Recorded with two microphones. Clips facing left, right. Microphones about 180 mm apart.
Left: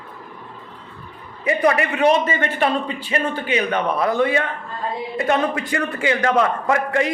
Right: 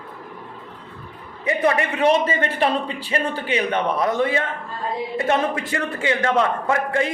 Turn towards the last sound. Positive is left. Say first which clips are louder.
# left 2 dB
turn(degrees=-30)  # may be behind; listen again after turning